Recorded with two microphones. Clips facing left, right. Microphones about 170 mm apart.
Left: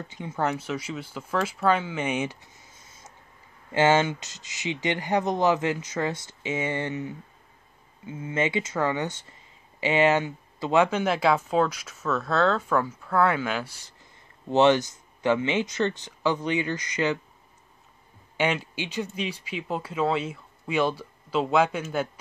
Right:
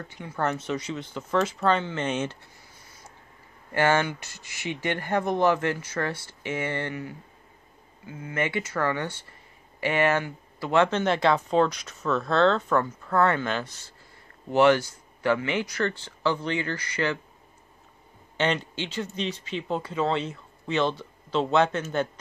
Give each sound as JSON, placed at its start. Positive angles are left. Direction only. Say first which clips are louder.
{"t": 0.1, "sound": "speech", "louder": "left 1 dB", "side_deg": 20}
{"t": 14.5, "sound": "speech", "louder": "even", "side_deg": 20}
{"t": 18.4, "sound": "speech", "louder": "even", "side_deg": 10}